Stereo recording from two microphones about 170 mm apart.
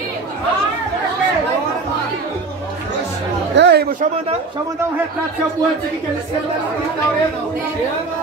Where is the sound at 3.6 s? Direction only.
90° right.